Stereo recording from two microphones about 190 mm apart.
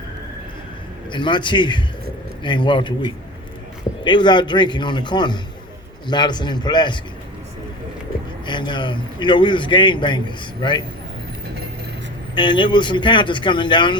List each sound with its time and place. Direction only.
1.1 s a man's voice: 25° left (ahead or behind)
4.0 s a man's voice: 25° left (ahead or behind)
8.4 s a man's voice: 25° left (ahead or behind)
12.3 s a man's voice: 25° left (ahead or behind)